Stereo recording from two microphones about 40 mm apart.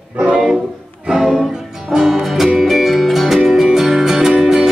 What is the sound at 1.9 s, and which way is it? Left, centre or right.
Music, centre.